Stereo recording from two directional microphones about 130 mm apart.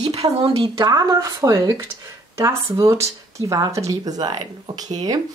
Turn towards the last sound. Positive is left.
turn(degrees=-30)  # may be behind; listen again after turning